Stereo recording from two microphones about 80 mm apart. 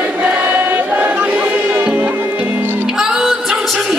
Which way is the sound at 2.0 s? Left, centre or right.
Right.